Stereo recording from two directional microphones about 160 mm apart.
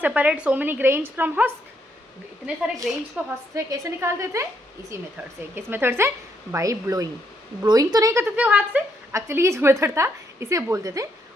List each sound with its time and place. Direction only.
0.0 s a woman's voice: 10° right (ahead or behind)
2.8 s a woman's voice: 5° right (ahead or behind)
3.5 s a woman's voice: 20° right (ahead or behind)
5.5 s a woman's voice: 15° right (ahead or behind)